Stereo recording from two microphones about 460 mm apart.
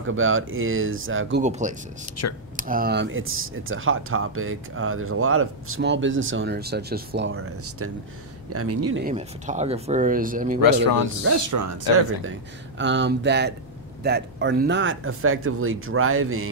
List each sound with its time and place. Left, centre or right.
0.0 s speech: right
2.2 s speech: left
2.5 s speech: centre
9.0 s speech: centre
10.6 s speech: left
11.2 s speech: right
12.2 s speech: right